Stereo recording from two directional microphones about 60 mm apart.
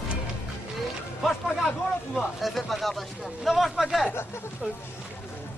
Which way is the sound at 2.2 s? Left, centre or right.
Centre.